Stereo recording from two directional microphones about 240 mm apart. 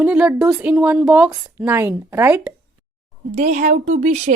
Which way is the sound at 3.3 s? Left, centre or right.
Right.